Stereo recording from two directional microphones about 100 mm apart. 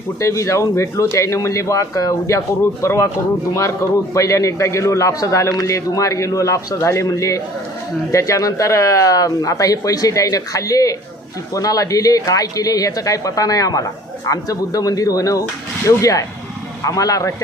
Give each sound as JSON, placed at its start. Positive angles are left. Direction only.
{"t": 0.2, "sound": "a man's voice", "side_deg": 30}